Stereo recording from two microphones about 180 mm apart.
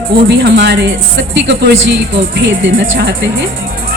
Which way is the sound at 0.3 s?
70° right (ahead or behind).